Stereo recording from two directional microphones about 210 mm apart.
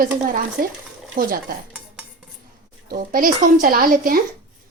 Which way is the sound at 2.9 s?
40° right (ahead or behind).